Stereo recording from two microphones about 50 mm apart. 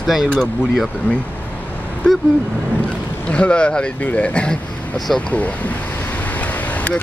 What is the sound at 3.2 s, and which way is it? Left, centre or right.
Speech, left.